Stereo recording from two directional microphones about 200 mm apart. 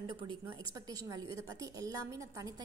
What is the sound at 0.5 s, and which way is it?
A woman's voice, 15° right (ahead or behind).